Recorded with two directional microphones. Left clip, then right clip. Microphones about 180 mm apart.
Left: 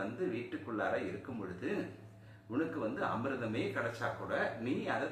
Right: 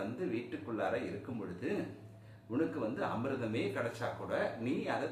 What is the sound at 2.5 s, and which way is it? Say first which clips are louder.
Speech: right 1 dB; 15° right (ahead or behind).